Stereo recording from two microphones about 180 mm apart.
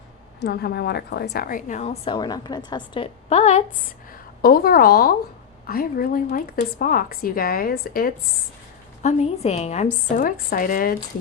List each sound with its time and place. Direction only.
0.3 s a woman's voice: 60° left (ahead or behind); by 3.6 s 35° left (ahead or behind)
4.4 s speech: 55° left (ahead or behind)
9.0 s a woman's voice: 35° left (ahead or behind)